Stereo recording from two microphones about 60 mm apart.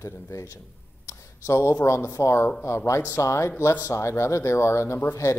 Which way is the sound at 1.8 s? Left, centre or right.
Left.